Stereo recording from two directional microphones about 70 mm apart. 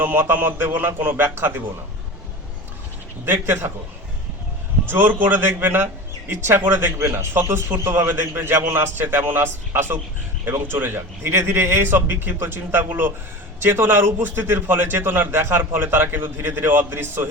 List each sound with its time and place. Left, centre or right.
0.0 s a man's voice: right
3.2 s a man's voice: right
4.9 s a man's voice: right